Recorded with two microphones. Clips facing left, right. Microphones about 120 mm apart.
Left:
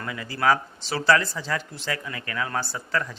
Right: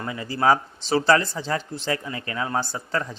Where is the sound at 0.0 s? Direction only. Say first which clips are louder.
Right 2 dB; 25° right (ahead or behind).